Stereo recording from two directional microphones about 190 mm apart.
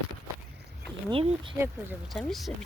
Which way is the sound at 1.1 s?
30° right (ahead or behind).